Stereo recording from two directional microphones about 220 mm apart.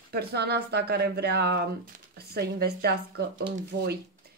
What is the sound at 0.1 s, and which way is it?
A woman's voice, 45° right (ahead or behind).